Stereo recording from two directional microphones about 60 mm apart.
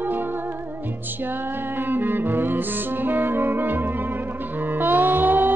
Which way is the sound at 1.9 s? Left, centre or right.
Right.